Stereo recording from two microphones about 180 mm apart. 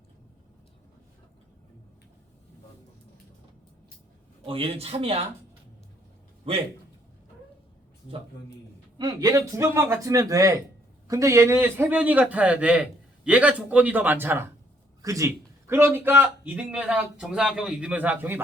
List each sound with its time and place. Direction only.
4.4 s speech: 30° right (ahead or behind)
6.5 s speech: 30° right (ahead or behind)
9.0 s a man's voice: 20° right (ahead or behind)